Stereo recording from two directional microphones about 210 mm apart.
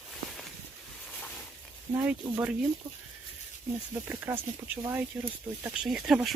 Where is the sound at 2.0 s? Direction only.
10° right (ahead or behind).